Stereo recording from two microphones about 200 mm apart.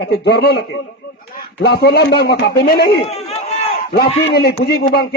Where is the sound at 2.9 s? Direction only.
30° left (ahead or behind).